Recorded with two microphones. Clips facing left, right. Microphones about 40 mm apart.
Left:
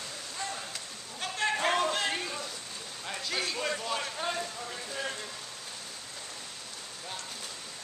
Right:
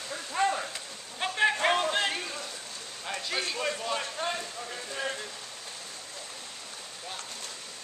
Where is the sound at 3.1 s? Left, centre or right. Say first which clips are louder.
Right 1 dB; centre.